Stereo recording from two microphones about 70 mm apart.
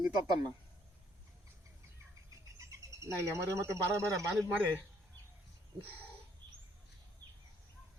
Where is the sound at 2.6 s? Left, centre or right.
Right.